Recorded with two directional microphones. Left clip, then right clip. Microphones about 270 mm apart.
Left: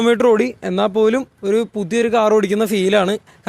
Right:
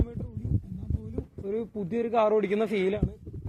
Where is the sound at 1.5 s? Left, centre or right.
Left.